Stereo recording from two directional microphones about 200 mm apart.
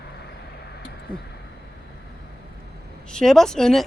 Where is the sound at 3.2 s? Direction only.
Centre (ahead or behind).